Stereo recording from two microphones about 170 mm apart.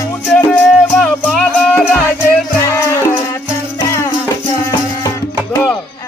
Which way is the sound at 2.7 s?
15° left (ahead or behind).